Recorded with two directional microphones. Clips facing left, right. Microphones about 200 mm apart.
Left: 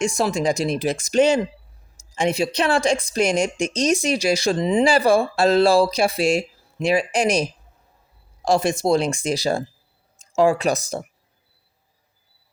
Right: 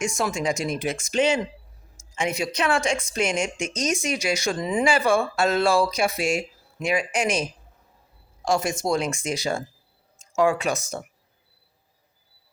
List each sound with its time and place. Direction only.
0.0 s speech: 35° left (ahead or behind)
4.9 s speech: 35° left (ahead or behind)
8.4 s speech: 35° left (ahead or behind)